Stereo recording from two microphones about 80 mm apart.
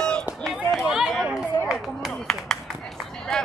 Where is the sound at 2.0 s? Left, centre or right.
Centre.